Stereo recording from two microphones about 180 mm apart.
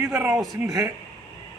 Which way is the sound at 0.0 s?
15° right (ahead or behind).